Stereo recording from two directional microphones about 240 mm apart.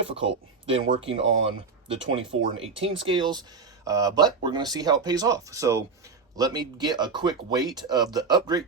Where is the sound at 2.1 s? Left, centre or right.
Right.